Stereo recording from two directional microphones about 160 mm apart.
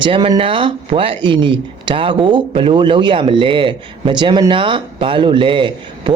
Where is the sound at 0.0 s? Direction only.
30° right (ahead or behind).